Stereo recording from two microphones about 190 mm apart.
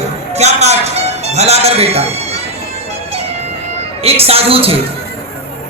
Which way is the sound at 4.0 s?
30° right (ahead or behind).